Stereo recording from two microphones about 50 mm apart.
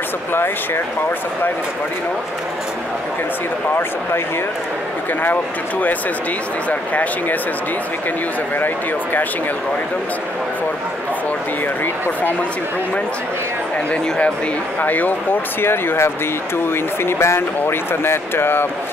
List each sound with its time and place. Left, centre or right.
5.2 s speech: left
8.5 s speech: left
11.8 s speech: left
14.8 s speech: left
15.6 s speech: left